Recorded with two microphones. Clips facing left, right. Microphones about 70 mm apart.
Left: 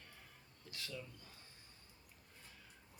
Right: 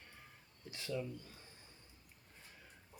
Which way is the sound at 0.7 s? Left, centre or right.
Right.